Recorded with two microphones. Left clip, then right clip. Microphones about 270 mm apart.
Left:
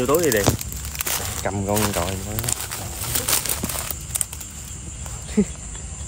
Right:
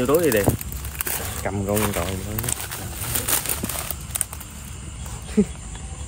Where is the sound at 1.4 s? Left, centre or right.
Left.